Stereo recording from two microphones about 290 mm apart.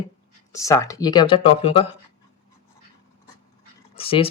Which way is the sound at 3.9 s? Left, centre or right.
Centre.